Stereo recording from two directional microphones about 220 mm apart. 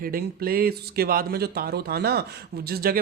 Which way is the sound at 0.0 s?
45° right (ahead or behind).